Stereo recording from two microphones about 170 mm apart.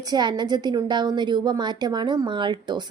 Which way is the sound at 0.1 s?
25° right (ahead or behind).